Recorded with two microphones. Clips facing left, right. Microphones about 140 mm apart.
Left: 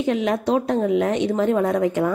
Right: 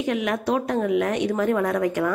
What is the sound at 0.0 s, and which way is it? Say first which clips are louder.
A woman's voice: left 3 dB; 30° left (ahead or behind).